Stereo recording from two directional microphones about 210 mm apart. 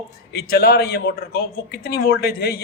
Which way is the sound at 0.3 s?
50° left (ahead or behind).